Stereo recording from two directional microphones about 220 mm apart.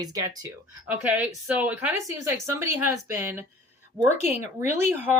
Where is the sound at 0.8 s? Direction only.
5° right (ahead or behind).